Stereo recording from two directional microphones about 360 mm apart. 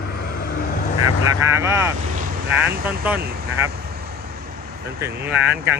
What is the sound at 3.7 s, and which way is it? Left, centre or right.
Vehicle, right.